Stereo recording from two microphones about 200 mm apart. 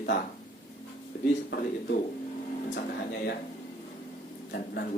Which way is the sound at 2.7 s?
50° left (ahead or behind).